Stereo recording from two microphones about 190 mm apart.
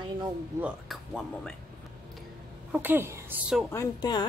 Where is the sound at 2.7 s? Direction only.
10° right (ahead or behind).